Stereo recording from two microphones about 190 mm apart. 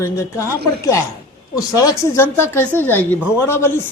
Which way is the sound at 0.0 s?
15° left (ahead or behind).